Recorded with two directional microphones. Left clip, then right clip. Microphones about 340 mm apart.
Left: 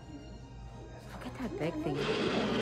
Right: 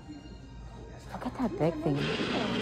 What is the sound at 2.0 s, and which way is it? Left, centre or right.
Speech, left.